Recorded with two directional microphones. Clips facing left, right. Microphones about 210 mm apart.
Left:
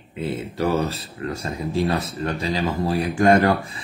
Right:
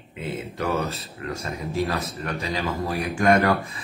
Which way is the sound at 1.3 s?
30° left (ahead or behind).